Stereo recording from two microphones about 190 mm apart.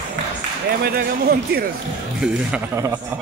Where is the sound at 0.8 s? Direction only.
55° right (ahead or behind).